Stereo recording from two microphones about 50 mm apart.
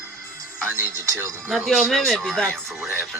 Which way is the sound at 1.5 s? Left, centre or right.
Centre.